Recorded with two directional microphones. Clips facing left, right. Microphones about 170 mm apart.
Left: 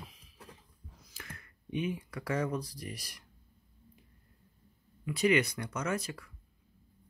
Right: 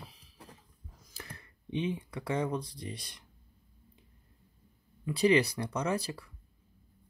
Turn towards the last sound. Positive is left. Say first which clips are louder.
# right 2 dB
turn(degrees=-30)  # may be behind; listen again after turning